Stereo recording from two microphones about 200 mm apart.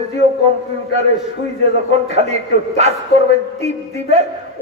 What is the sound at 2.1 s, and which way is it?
A man's voice, 30° right (ahead or behind).